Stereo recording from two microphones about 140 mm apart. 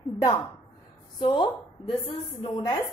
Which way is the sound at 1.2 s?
35° left (ahead or behind).